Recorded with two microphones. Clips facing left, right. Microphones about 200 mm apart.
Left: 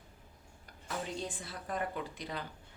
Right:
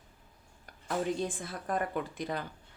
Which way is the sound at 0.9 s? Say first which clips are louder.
Right 7 dB; 50° right (ahead or behind).